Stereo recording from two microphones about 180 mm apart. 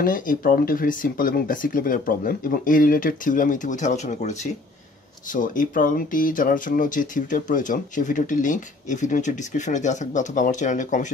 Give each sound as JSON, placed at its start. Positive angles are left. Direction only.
{"t": 0.0, "sound": "speech", "side_deg": 50}